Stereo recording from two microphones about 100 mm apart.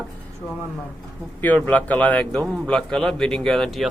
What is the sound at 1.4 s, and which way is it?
A man's voice, 15° left (ahead or behind).